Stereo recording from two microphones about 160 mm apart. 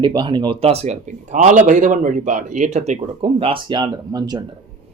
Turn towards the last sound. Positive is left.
turn(degrees=-25)  # may be behind; listen again after turning